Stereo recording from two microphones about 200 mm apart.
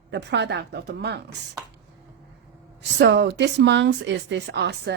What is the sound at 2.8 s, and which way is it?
Speech, 60° right (ahead or behind).